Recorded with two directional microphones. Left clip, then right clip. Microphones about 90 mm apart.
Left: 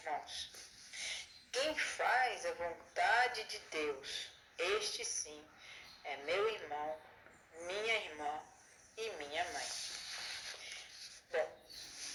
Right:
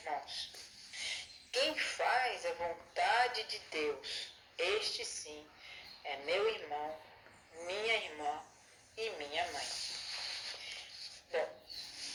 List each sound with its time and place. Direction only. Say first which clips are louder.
0.0 s a woman's voice: right 2 dB; 25° left (ahead or behind)
9.0 s a sound: right 2 dB; 25° left (ahead or behind)
11.3 s speech: right 1 dB; 25° left (ahead or behind)